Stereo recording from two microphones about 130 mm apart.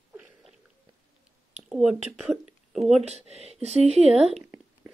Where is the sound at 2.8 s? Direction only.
55° right (ahead or behind).